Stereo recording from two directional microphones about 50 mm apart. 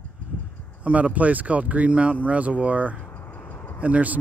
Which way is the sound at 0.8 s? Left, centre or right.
Right.